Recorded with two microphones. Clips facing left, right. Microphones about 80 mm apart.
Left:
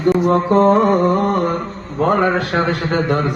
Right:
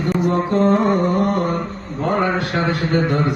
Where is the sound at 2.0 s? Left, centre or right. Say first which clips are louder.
Left 4 dB; left.